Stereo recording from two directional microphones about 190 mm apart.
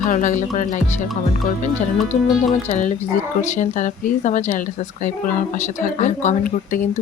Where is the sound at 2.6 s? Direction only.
40° left (ahead or behind).